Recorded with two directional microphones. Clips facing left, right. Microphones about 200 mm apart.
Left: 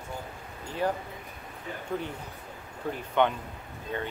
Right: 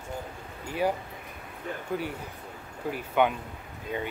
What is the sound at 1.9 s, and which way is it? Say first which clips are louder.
Speech: right 1 dB; 5° right (ahead or behind).